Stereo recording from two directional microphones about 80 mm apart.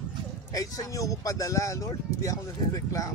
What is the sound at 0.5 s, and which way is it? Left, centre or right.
Speech, left.